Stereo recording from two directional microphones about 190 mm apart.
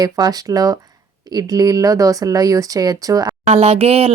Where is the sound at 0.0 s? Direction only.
20° right (ahead or behind).